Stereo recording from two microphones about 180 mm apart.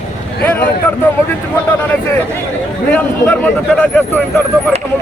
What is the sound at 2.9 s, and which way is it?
Speech, 10° left (ahead or behind).